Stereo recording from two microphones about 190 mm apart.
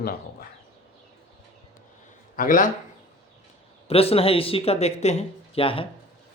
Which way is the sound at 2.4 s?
45° left (ahead or behind).